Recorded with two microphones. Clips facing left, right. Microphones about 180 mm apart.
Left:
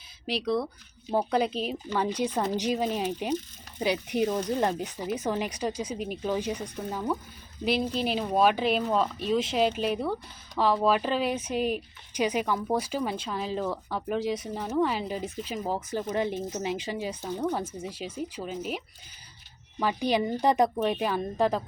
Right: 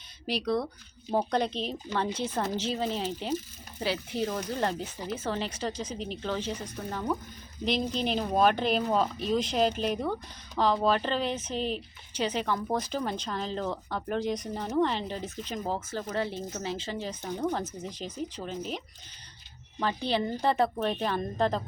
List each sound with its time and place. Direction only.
0.3 s speech: centre (ahead or behind)
19.8 s speech: 15° left (ahead or behind)